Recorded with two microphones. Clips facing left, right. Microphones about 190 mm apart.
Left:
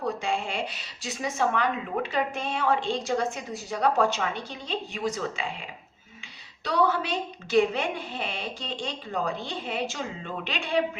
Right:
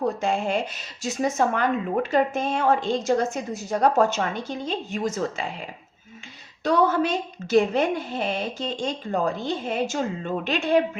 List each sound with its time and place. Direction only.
0.0 s speech: 45° right (ahead or behind)
6.7 s speech: 45° right (ahead or behind)